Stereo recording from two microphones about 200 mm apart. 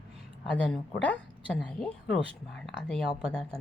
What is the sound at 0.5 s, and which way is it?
A woman's voice, 5° left (ahead or behind).